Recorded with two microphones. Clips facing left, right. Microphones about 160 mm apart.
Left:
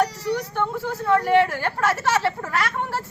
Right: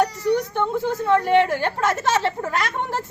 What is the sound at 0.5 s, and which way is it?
A woman's voice, 20° right (ahead or behind).